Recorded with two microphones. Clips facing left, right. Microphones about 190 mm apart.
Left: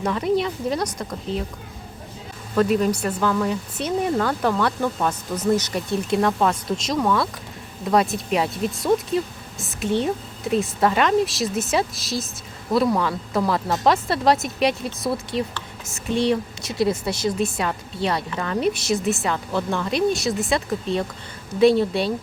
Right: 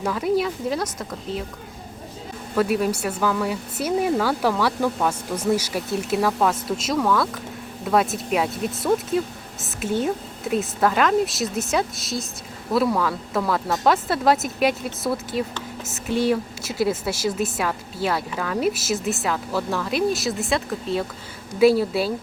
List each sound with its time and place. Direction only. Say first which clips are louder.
0.0 s a woman's voice: even; 5° right (ahead or behind)
2.6 s a woman's voice: left 2 dB; 10° right (ahead or behind)